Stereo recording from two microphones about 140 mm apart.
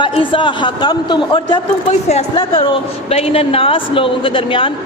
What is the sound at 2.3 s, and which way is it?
A woman's voice, 40° left (ahead or behind).